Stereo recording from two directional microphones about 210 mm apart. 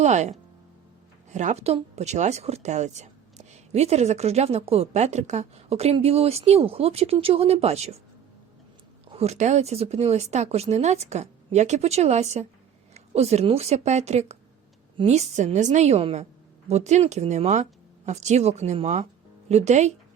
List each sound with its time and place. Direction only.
0.0 s speech: 35° right (ahead or behind)
9.1 s speech: 30° right (ahead or behind)